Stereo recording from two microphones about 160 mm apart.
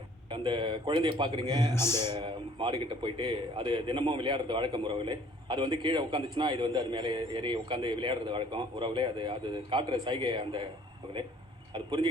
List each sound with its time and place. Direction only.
0.3 s a man's voice: 30° right (ahead or behind)
1.7 s speech: 15° left (ahead or behind)
2.0 s a man's voice: 30° right (ahead or behind)
11.7 s speech: 30° right (ahead or behind)